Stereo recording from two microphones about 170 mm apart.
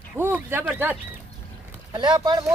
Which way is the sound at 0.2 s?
10° right (ahead or behind).